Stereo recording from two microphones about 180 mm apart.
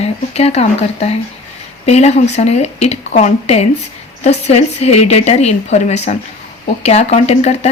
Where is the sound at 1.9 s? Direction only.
35° left (ahead or behind).